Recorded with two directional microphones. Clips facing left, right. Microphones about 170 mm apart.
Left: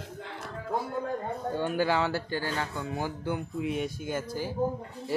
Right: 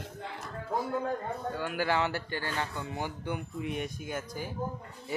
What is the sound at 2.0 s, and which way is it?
Speech, 15° right (ahead or behind).